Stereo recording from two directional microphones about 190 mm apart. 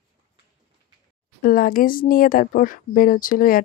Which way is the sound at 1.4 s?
50° left (ahead or behind).